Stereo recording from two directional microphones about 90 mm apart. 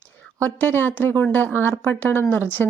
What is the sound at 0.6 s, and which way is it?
Speech, 25° left (ahead or behind).